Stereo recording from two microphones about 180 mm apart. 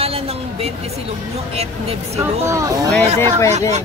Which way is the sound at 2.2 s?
15° right (ahead or behind).